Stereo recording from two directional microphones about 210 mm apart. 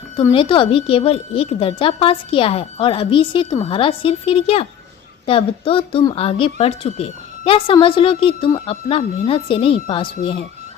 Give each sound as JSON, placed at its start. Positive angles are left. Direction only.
{"t": 0.2, "sound": "a woman's voice", "side_deg": 25}